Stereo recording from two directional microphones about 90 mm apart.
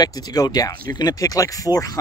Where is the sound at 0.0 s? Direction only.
45° left (ahead or behind).